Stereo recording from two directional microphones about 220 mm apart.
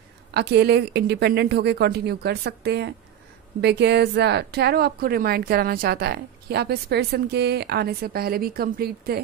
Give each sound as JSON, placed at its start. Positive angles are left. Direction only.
{"t": 0.3, "sound": "speech", "side_deg": -50}